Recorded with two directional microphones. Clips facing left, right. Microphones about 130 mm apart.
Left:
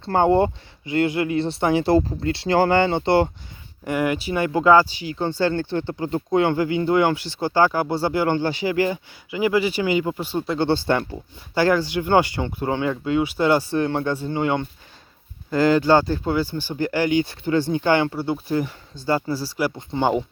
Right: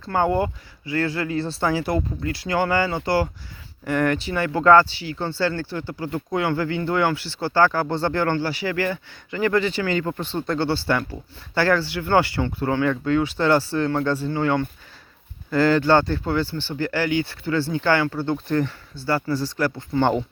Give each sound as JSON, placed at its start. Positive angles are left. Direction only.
{"t": 0.1, "sound": "speech", "side_deg": 25}
{"t": 3.8, "sound": "speech", "side_deg": 10}
{"t": 10.7, "sound": "speech", "side_deg": 25}